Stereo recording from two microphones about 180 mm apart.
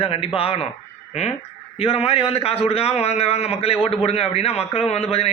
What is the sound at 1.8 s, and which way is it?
A man's voice, 35° left (ahead or behind).